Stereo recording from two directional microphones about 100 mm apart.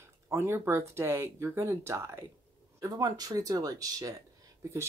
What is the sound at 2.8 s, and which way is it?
Speech, 40° right (ahead or behind).